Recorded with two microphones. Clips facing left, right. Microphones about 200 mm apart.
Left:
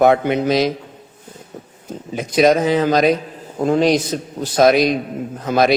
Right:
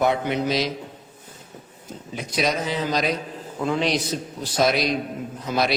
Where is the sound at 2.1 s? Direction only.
50° left (ahead or behind).